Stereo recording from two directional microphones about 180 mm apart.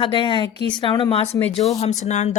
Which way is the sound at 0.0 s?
30° left (ahead or behind).